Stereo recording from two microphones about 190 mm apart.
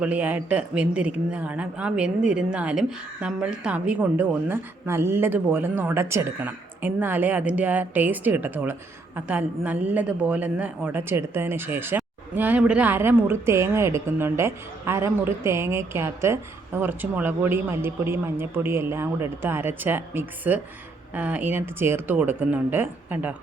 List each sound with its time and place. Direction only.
0.0 s speech: 10° right (ahead or behind)